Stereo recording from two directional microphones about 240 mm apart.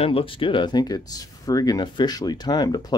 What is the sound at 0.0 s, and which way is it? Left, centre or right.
Speech, left.